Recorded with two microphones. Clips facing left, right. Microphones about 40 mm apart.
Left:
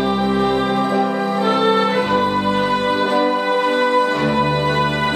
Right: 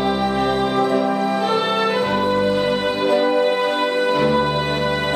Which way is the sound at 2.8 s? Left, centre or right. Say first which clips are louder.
Left 1 dB; left.